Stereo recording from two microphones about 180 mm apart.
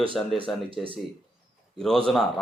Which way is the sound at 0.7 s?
30° right (ahead or behind).